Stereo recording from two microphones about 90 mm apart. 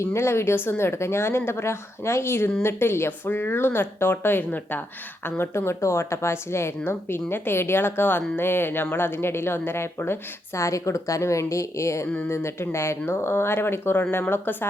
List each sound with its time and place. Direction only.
0.0 s speech: 30° left (ahead or behind)